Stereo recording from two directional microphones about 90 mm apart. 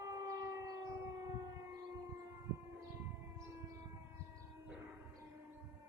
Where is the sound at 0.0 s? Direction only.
35° right (ahead or behind).